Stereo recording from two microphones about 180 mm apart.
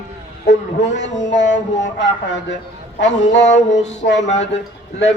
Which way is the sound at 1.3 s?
85° left.